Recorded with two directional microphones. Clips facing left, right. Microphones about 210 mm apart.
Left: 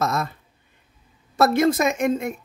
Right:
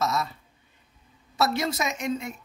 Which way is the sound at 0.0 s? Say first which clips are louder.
Left 3 dB; 55° left (ahead or behind).